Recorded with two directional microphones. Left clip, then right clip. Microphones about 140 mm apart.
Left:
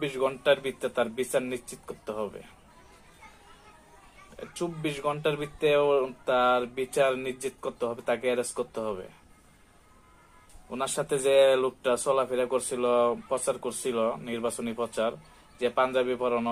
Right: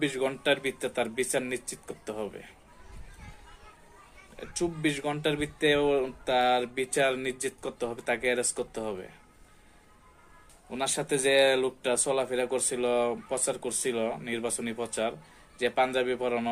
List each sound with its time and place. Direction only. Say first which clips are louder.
0.0 s speech: left 2 dB; 25° right (ahead or behind)
4.6 s speech: right 1 dB; 25° right (ahead or behind)
10.7 s speech: left 1 dB; 25° right (ahead or behind)